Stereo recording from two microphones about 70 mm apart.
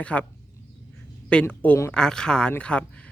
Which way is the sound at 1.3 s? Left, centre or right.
Centre.